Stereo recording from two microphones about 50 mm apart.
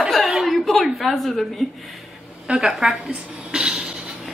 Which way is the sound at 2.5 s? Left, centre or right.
Centre.